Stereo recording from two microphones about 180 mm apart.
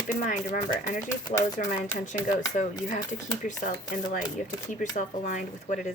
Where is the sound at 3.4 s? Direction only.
45° left (ahead or behind).